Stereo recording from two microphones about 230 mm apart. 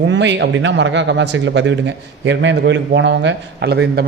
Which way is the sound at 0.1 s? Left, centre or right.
Right.